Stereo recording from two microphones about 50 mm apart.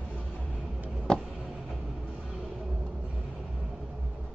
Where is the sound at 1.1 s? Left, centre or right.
Centre.